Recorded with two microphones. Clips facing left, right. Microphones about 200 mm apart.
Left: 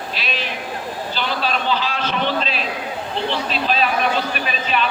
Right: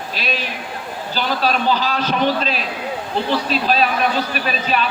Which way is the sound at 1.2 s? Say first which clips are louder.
Right 4 dB; 40° right (ahead or behind).